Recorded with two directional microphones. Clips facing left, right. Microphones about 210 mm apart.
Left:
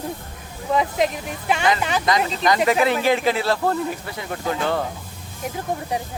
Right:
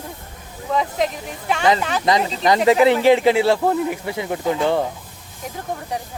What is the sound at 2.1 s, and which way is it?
Speech, 30° right (ahead or behind).